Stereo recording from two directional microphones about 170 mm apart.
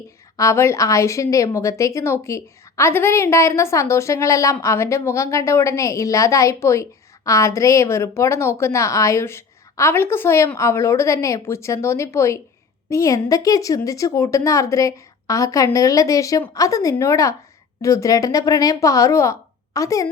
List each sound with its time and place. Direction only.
0.3 s a woman's voice: 15° left (ahead or behind)